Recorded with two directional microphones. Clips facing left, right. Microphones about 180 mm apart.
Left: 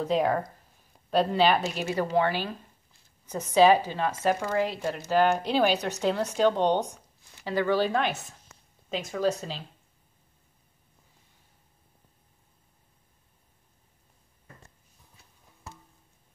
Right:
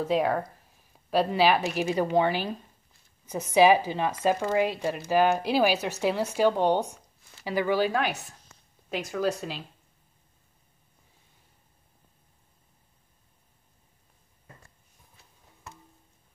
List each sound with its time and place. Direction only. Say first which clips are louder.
0.0 s speech: even; 5° right (ahead or behind)
3.5 s speech: even; 10° right (ahead or behind)